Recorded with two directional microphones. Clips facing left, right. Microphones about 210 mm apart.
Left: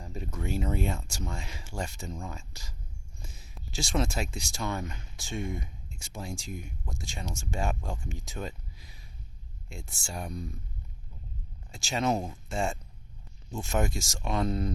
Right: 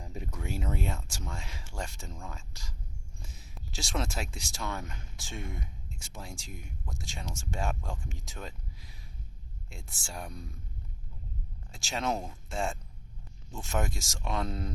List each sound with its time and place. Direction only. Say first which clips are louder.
0.1 s a sound: left 3 dB; 15° right (ahead or behind)
0.3 s speech: left 5 dB; 5° right (ahead or behind)
11.7 s speech: left 4 dB; centre (ahead or behind)